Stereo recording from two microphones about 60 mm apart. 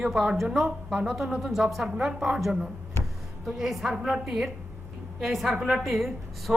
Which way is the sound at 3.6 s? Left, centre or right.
Centre.